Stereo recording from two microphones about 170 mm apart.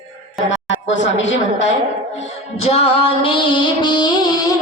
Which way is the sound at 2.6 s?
35° left (ahead or behind).